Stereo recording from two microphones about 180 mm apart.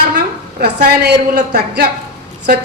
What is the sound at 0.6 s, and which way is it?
A man's voice, 60° right (ahead or behind).